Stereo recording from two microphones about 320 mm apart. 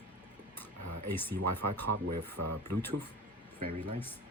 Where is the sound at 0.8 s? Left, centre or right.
Right.